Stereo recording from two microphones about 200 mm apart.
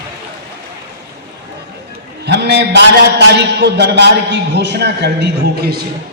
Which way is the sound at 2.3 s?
55° right (ahead or behind).